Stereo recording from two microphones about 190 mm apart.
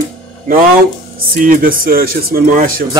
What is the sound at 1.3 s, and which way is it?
Speech, 45° right (ahead or behind).